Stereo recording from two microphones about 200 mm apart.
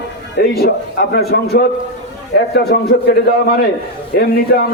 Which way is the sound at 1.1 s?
50° left (ahead or behind).